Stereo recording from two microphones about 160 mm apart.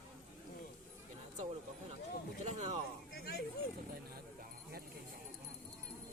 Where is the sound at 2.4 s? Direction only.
45° right (ahead or behind).